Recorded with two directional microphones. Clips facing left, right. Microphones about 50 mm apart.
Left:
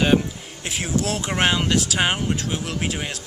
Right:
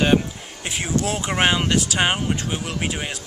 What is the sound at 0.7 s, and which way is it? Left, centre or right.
Speech, centre.